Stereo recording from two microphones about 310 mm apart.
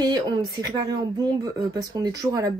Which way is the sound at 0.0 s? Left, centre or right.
Centre.